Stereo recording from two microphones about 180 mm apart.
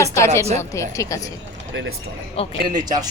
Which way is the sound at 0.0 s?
15° left (ahead or behind).